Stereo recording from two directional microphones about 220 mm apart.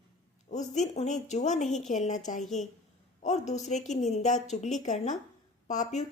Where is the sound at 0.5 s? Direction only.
30° left (ahead or behind).